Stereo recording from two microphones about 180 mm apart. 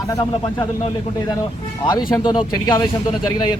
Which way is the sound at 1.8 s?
25° left (ahead or behind).